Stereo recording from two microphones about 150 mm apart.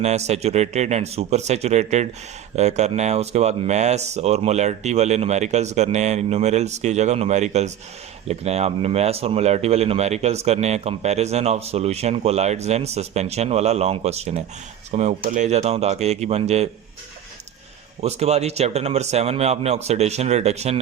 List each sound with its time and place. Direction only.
0.0 s speech: 45° right (ahead or behind)
18.0 s speech: 45° right (ahead or behind)